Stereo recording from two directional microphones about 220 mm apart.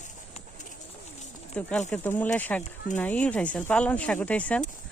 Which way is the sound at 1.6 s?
5° left (ahead or behind).